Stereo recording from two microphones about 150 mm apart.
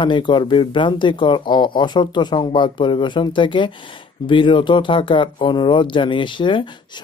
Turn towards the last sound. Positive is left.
turn(degrees=30)  # may be behind; listen again after turning